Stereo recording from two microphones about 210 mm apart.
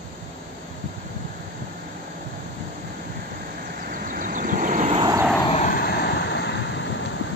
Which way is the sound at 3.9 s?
40° right (ahead or behind).